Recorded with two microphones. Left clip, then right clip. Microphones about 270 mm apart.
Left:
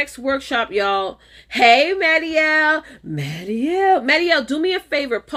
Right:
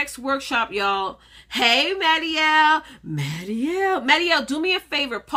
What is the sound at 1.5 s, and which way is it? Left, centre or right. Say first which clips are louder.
Speech: left 6 dB; right.